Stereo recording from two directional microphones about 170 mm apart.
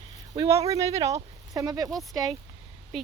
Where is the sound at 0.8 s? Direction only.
35° right (ahead or behind).